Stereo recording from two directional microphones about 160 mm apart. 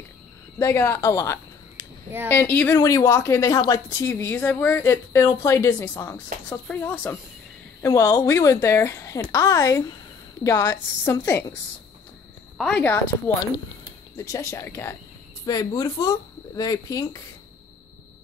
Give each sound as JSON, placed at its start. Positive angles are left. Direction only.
{"t": 0.6, "sound": "a woman's voice", "side_deg": 15}
{"t": 12.5, "sound": "speech", "side_deg": 5}